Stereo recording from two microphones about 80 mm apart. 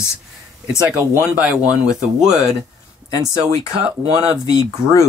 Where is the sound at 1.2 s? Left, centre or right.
Centre.